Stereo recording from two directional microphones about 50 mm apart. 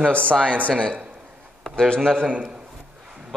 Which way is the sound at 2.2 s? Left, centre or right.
Right.